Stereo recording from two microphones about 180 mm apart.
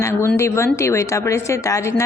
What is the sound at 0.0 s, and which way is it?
A woman's voice, 15° left (ahead or behind).